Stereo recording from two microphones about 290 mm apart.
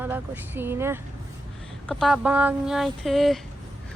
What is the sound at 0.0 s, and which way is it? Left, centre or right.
Speech, centre.